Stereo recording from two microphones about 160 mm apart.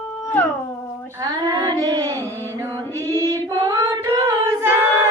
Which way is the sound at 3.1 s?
25° right (ahead or behind).